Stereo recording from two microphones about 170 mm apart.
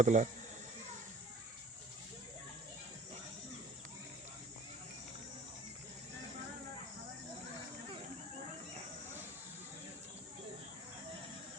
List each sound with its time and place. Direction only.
0.0 s speech: 45° right (ahead or behind)